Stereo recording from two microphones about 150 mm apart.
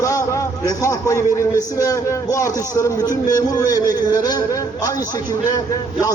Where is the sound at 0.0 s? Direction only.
20° left (ahead or behind).